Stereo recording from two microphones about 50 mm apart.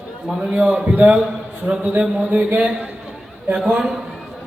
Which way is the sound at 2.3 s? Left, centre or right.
Right.